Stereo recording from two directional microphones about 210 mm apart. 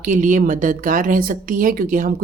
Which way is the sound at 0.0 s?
35° right (ahead or behind).